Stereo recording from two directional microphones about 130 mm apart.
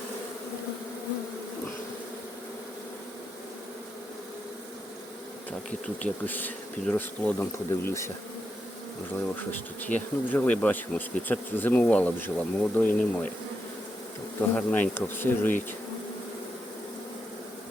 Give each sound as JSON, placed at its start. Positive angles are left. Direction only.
{"t": 6.0, "sound": "bee", "side_deg": 15}
{"t": 9.5, "sound": "bee", "side_deg": 15}
{"t": 14.5, "sound": "bee", "side_deg": 15}